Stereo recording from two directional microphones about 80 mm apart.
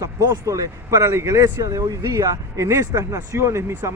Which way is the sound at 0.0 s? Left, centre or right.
Right.